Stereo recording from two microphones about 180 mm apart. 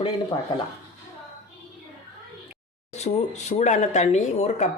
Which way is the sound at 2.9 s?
40° left (ahead or behind).